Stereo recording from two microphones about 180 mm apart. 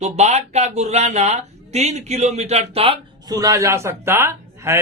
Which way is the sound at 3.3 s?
20° right (ahead or behind).